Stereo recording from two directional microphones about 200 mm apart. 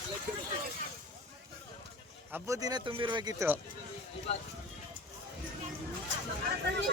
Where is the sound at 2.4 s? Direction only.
15° right (ahead or behind).